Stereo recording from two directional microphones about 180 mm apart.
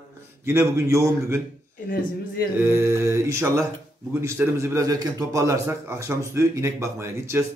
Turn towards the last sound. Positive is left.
turn(degrees=-15)  # may be behind; listen again after turning